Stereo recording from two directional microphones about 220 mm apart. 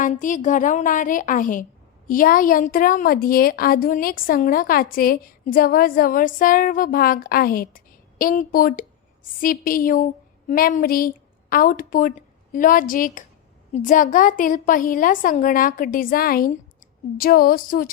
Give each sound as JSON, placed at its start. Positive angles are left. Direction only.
{"t": 0.0, "sound": "a woman's voice", "side_deg": 35}